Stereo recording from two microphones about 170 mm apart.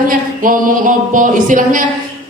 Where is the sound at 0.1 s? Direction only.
55° right (ahead or behind).